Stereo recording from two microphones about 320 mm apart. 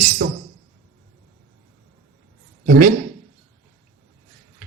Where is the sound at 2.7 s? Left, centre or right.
Right.